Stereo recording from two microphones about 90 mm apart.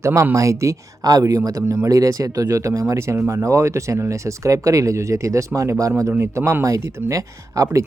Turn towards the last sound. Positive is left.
turn(degrees=-35)  # may be behind; listen again after turning